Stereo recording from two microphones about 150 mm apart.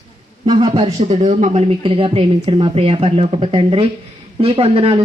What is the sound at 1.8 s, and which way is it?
A woman's voice, 35° right (ahead or behind).